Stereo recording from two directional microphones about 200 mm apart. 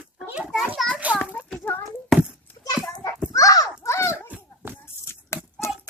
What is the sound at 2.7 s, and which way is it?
Children playing, 15° left (ahead or behind).